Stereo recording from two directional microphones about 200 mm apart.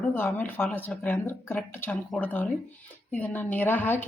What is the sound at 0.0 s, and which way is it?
A woman's voice, 10° left (ahead or behind).